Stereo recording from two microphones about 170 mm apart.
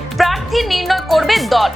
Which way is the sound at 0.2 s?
Centre (ahead or behind).